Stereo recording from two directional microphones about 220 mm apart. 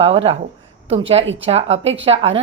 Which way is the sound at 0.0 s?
25° right (ahead or behind).